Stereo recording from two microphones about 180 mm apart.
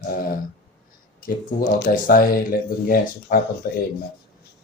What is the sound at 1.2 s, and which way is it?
Speech, 60° left (ahead or behind).